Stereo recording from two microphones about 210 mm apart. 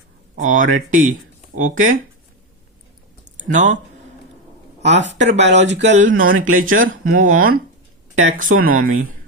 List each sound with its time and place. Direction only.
0.3 s speech: 40° right (ahead or behind)
3.5 s speech: 35° right (ahead or behind)
4.9 s speech: 60° right (ahead or behind)
5.2 s speech: 35° right (ahead or behind)